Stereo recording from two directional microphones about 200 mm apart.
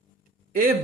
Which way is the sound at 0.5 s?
45° right (ahead or behind).